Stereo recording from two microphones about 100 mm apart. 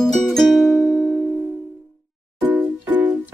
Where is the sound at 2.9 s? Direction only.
15° right (ahead or behind).